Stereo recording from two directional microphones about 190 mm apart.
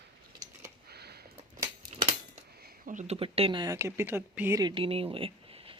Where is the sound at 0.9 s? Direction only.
55° right (ahead or behind).